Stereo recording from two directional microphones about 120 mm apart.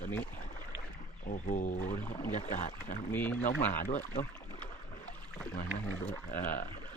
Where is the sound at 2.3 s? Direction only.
75° left (ahead or behind).